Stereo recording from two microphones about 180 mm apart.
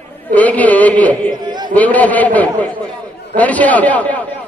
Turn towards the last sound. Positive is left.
turn(degrees=10)  # may be behind; listen again after turning